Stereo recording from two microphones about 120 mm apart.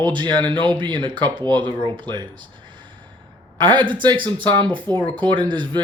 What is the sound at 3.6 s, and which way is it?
Speech, 40° right (ahead or behind).